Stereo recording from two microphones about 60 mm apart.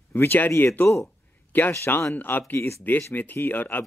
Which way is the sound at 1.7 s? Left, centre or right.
Left.